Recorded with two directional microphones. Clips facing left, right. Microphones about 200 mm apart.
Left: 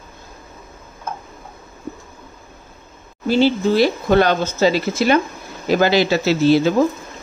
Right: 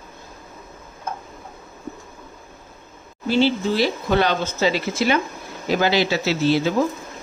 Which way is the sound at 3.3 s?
45° left (ahead or behind).